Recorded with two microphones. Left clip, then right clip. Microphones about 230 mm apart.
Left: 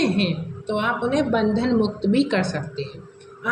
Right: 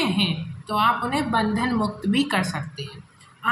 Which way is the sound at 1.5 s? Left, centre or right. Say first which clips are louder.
Left 3 dB; right.